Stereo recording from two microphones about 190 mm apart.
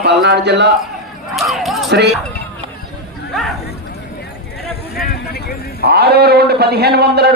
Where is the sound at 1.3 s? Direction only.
Centre (ahead or behind).